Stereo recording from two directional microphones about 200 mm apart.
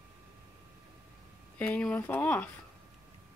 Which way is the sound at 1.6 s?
5° left (ahead or behind).